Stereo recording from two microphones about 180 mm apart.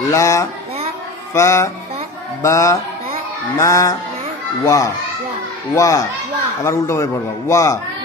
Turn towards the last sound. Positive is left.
turn(degrees=15)  # may be behind; listen again after turning